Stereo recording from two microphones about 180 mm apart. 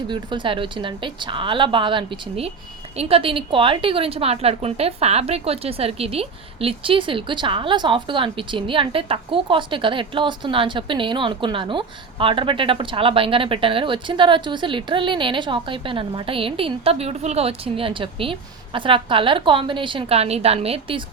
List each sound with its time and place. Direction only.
0.1 s a woman's voice: 25° right (ahead or behind)